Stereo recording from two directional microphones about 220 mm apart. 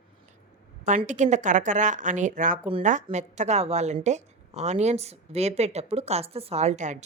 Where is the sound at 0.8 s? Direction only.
35° right (ahead or behind).